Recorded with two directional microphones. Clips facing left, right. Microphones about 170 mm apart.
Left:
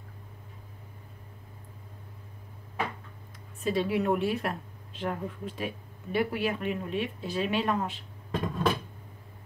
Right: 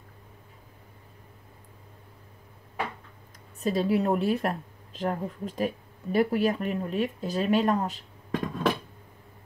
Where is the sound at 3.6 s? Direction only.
40° right (ahead or behind).